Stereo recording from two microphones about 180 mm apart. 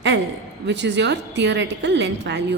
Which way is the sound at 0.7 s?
75° right (ahead or behind).